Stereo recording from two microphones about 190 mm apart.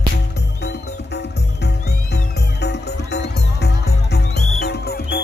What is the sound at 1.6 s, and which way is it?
Music, 60° left (ahead or behind).